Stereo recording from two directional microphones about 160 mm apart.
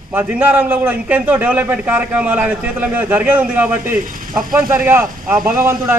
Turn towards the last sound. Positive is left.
turn(degrees=-15)  # may be behind; listen again after turning